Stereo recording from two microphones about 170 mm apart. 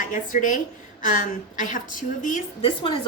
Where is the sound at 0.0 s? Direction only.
50° left (ahead or behind).